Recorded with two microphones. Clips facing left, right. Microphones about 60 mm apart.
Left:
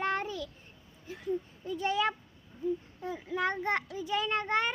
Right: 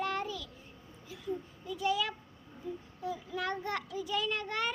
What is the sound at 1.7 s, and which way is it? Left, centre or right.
A child's voice, left.